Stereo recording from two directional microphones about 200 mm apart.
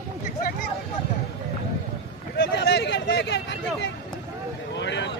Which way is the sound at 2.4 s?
60° left (ahead or behind).